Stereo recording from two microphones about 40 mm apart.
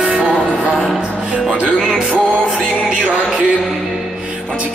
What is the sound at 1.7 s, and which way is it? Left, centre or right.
Music, centre.